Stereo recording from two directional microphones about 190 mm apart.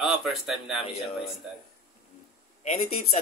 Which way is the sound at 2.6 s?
35° left (ahead or behind).